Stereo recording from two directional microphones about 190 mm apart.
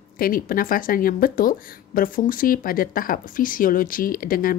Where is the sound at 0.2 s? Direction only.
50° left (ahead or behind).